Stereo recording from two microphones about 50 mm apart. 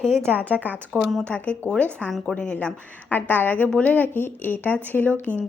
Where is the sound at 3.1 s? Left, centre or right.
Left.